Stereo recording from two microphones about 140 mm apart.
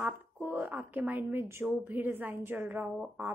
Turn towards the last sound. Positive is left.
turn(degrees=-5)  # may be behind; listen again after turning